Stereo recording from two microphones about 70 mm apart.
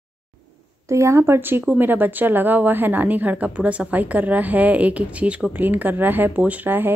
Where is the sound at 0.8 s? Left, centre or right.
Right.